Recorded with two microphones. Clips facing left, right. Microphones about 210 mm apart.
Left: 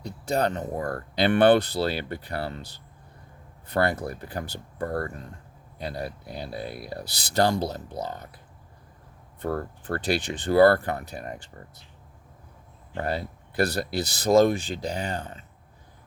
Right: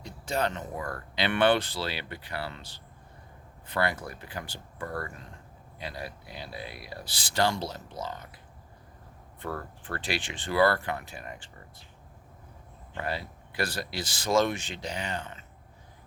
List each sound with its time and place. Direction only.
0.0 s speech: 40° left (ahead or behind)
3.7 s speech: 45° left (ahead or behind)
9.4 s speech: 40° left (ahead or behind)
12.9 s speech: 45° left (ahead or behind)